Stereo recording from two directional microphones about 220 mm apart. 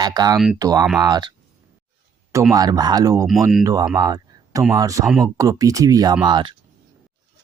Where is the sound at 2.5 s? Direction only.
15° right (ahead or behind).